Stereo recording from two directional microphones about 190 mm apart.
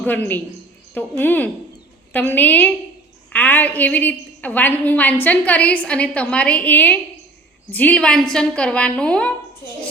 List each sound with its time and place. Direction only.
0.9 s a woman's voice: 10° left (ahead or behind)